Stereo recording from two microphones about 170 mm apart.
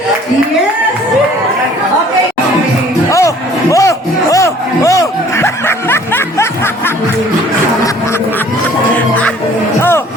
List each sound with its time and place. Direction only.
3.1 s music: 20° left (ahead or behind)
9.0 s music: 10° left (ahead or behind)